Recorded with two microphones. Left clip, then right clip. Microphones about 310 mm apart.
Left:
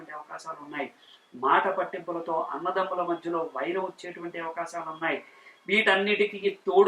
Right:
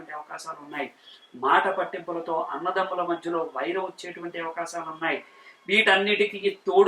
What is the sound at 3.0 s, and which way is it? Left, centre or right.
Speech, centre.